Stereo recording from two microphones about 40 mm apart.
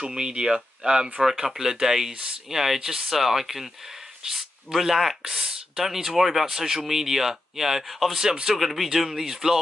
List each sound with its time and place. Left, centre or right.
0.0 s speech: centre
4.7 s speech: centre